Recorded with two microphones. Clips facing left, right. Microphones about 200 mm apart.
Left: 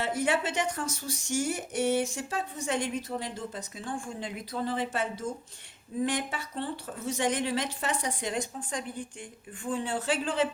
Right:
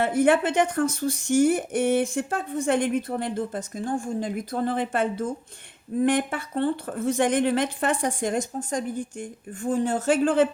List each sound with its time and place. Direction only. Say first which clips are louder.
0.0 s a woman's voice: right 8 dB; 55° right (ahead or behind)